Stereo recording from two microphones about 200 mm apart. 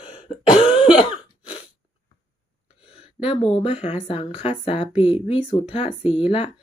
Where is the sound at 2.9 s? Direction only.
30° left (ahead or behind).